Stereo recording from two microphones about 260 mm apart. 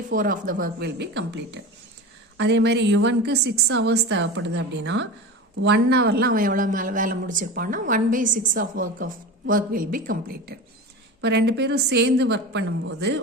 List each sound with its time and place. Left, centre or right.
0.1 s speech: right